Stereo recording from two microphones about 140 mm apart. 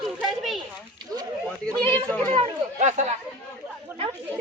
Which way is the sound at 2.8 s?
55° right (ahead or behind).